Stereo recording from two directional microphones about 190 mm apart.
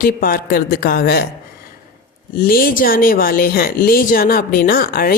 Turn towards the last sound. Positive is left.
turn(degrees=50)  # may be behind; listen again after turning